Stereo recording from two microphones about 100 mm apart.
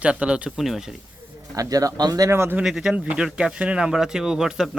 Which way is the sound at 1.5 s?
35° right (ahead or behind).